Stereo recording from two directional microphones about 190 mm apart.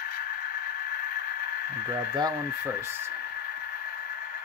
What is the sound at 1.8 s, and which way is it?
Speech, 20° right (ahead or behind).